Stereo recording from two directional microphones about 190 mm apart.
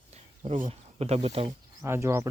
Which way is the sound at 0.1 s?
40° right (ahead or behind).